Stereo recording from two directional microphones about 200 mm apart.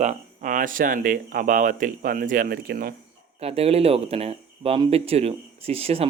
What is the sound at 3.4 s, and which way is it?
Speech, 30° right (ahead or behind).